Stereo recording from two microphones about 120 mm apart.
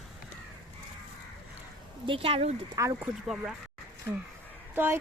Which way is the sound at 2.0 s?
50° right (ahead or behind).